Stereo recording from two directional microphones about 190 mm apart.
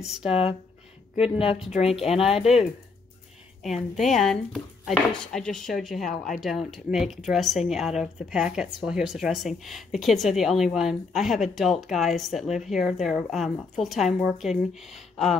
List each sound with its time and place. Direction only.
0.0 s speech: centre (ahead or behind)
0.3 s speech: 30° left (ahead or behind)
3.6 s speech: centre (ahead or behind)